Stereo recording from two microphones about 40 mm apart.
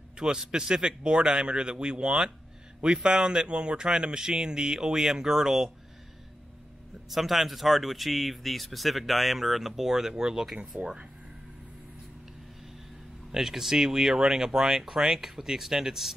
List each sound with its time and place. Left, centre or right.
0.2 s speech: centre
7.1 s speech: centre
13.3 s speech: centre